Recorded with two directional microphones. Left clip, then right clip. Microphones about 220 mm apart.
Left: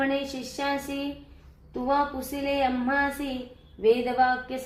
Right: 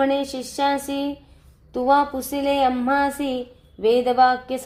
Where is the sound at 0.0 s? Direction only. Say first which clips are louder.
Right 6 dB; 40° right (ahead or behind).